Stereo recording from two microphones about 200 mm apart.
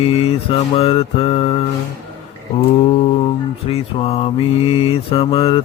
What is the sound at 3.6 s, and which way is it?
Mantra, 30° left (ahead or behind).